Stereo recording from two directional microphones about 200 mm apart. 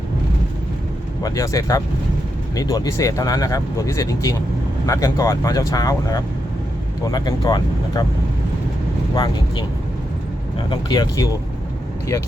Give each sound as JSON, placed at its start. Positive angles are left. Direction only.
{"t": 1.2, "sound": "speech", "side_deg": 15}
{"t": 9.1, "sound": "speech", "side_deg": 20}
{"t": 10.7, "sound": "speech", "side_deg": 20}